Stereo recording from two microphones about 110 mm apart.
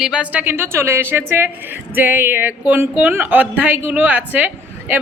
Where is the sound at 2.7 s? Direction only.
15° right (ahead or behind).